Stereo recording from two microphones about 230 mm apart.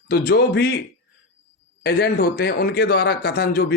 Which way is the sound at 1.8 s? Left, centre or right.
Left.